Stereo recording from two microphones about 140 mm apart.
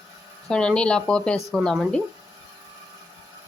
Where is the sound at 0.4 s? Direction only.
5° left (ahead or behind).